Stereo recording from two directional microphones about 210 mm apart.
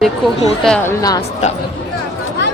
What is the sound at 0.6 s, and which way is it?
Speech, 5° left (ahead or behind).